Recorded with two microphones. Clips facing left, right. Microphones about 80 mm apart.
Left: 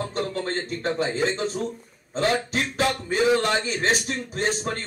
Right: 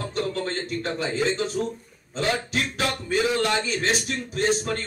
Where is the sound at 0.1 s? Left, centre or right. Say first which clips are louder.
Even; left.